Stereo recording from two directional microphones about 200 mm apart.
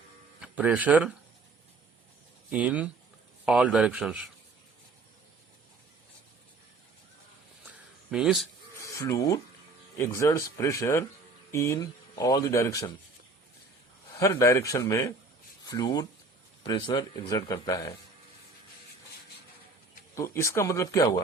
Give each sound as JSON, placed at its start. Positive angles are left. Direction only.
{"t": 0.3, "sound": "speech", "side_deg": -5}
{"t": 2.5, "sound": "speech", "side_deg": -5}
{"t": 8.1, "sound": "speech", "side_deg": -5}
{"t": 8.8, "sound": "speech", "side_deg": 15}
{"t": 14.2, "sound": "speech", "side_deg": 15}
{"t": 20.1, "sound": "speech", "side_deg": 15}